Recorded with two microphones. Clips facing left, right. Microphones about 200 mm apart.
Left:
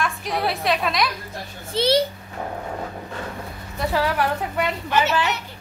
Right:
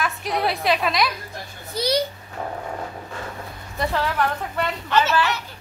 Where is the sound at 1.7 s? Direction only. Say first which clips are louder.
Left 4 dB; 25° left (ahead or behind).